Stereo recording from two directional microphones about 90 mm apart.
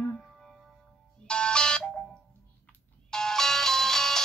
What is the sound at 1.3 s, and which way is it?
Music, 10° left (ahead or behind).